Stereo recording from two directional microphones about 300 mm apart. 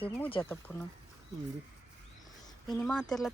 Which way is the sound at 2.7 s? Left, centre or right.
Centre.